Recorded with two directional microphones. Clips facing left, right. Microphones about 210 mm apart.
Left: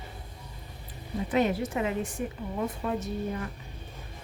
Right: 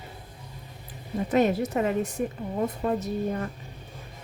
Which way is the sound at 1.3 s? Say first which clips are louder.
Right 4 dB; 40° right (ahead or behind).